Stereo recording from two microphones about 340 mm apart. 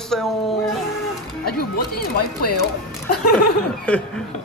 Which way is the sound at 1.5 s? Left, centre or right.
Left.